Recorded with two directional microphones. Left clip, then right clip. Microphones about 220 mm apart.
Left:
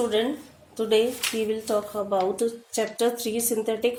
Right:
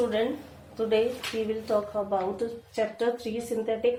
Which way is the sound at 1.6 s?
50° left (ahead or behind).